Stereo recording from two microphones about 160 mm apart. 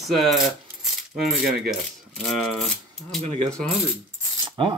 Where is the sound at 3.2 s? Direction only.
40° right (ahead or behind).